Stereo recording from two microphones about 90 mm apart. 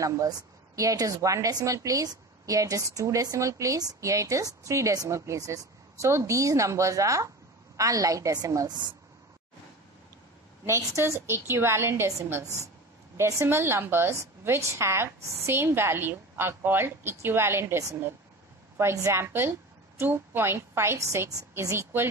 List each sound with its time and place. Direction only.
0.0 s a woman's voice: 40° right (ahead or behind)
10.6 s a woman's voice: 30° right (ahead or behind)